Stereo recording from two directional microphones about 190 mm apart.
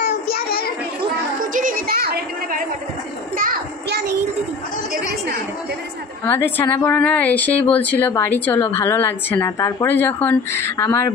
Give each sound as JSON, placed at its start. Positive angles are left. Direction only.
{"t": 0.3, "sound": "child singing", "side_deg": 50}
{"t": 1.4, "sound": "music", "side_deg": -45}
{"t": 3.3, "sound": "child singing", "side_deg": -45}
{"t": 4.9, "sound": "chatter", "side_deg": -50}
{"t": 6.2, "sound": "speech", "side_deg": 10}